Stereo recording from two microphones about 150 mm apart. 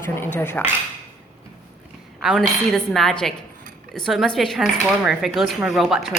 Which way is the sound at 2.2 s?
Centre (ahead or behind).